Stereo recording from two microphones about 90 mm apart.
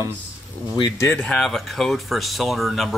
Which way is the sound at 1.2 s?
10° left (ahead or behind).